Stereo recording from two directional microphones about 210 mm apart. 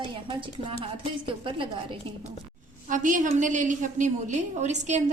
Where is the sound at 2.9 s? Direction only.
40° right (ahead or behind).